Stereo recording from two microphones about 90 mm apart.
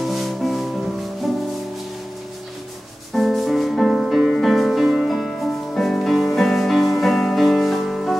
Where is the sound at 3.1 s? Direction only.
Centre (ahead or behind).